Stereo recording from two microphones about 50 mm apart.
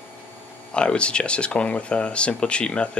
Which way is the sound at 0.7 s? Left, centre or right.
Centre.